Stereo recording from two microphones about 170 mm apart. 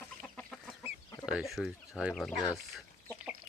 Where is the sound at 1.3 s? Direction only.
Centre (ahead or behind).